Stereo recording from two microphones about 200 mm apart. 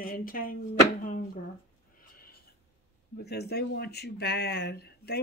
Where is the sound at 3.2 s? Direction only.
55° left (ahead or behind).